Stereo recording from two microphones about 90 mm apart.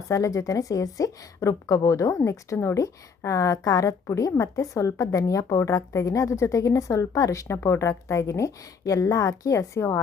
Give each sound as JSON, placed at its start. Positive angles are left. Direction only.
{"t": 0.1, "sound": "a woman's voice", "side_deg": 35}